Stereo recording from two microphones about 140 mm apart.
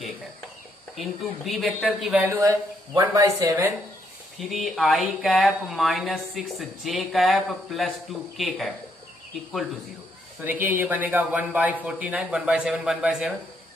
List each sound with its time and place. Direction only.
0.9 s speech: centre (ahead or behind)
2.2 s speech: 20° right (ahead or behind)
4.4 s speech: centre (ahead or behind)
10.4 s speech: 10° right (ahead or behind)